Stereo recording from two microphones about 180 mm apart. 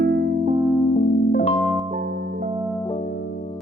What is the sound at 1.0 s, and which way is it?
Music, 55° left (ahead or behind).